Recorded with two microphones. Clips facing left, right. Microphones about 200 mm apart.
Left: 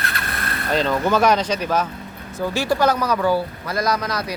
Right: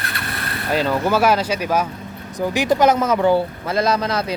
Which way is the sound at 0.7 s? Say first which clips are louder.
Right 1 dB; 10° right (ahead or behind).